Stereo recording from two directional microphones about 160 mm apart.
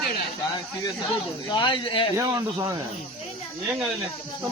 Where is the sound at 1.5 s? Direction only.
30° left (ahead or behind).